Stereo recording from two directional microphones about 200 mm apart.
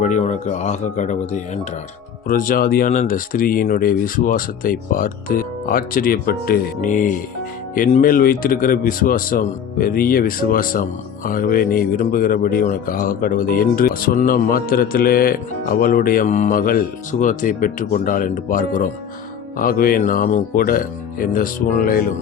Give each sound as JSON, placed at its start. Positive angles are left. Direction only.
{"t": 0.0, "sound": "speech", "side_deg": 35}